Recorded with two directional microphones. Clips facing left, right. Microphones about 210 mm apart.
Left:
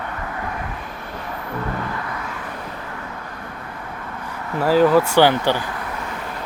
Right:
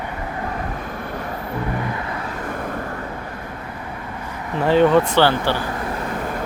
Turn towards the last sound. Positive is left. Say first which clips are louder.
# left 2 dB
turn(degrees=15)  # may be behind; listen again after turning